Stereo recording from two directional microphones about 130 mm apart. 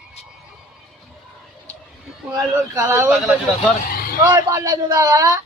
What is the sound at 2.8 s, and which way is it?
Speech, 20° right (ahead or behind).